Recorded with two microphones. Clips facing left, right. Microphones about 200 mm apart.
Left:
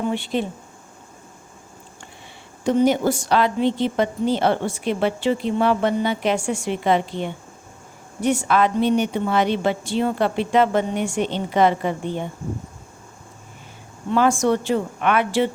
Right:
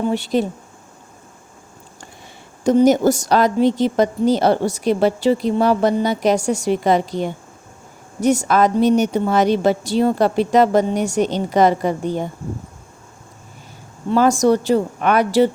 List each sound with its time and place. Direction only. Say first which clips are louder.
0.1 s a woman's voice: right 5 dB; 40° right (ahead or behind)
2.6 s a woman's voice: right 5 dB; 40° right (ahead or behind)
14.1 s a woman's voice: right 4 dB; 40° right (ahead or behind)